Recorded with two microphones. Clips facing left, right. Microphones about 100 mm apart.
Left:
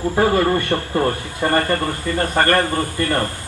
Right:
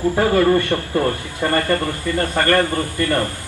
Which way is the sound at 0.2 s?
20° left (ahead or behind).